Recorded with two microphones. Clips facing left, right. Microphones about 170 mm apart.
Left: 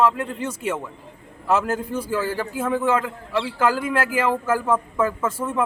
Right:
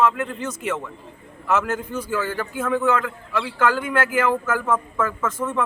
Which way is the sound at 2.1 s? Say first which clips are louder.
Even; 30° left (ahead or behind).